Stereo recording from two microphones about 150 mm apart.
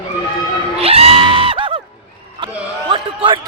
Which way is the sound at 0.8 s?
40° right (ahead or behind).